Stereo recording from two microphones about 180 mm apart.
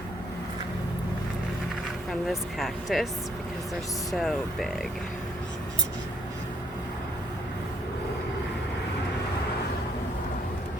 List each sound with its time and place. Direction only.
2.2 s speech: centre (ahead or behind)
4.1 s speech: centre (ahead or behind)